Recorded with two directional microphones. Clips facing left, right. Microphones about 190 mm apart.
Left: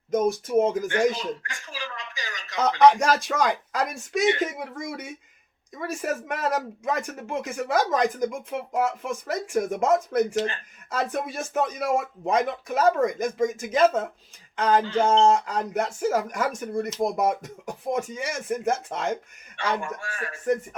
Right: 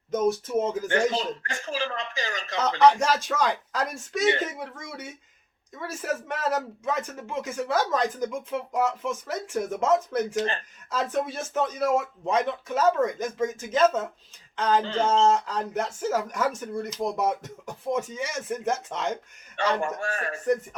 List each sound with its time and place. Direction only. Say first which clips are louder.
0.1 s speech: left 2 dB; 10° left (ahead or behind)
0.9 s speech: left 1 dB; 45° right (ahead or behind)
2.6 s speech: left 2 dB; 15° left (ahead or behind)
19.8 s speech: right 4 dB; 45° right (ahead or behind)